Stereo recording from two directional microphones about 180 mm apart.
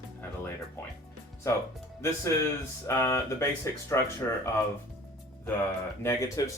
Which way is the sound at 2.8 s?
15° left (ahead or behind).